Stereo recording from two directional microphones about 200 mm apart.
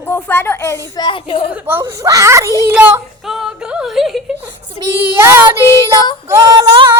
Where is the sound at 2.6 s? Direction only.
10° right (ahead or behind).